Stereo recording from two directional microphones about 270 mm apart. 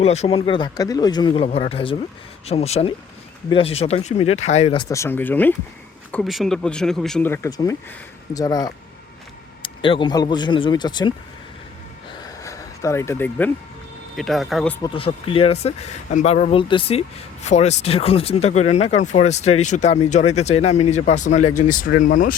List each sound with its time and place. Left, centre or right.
0.0 s speech: left
12.2 s a sound: centre
14.2 s speech: centre
14.8 s speech: centre